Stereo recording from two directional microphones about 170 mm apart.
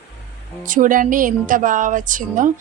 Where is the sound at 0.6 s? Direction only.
50° right (ahead or behind).